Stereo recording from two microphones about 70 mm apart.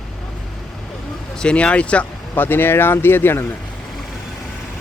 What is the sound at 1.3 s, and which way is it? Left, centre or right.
Speech, centre.